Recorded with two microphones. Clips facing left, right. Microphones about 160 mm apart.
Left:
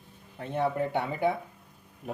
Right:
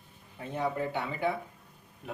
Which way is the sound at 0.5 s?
55° left (ahead or behind).